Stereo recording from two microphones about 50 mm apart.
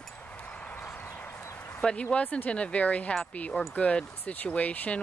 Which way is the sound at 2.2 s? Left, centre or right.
Left.